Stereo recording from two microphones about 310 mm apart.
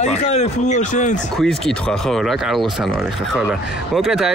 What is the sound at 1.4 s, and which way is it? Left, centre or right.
Speech, centre.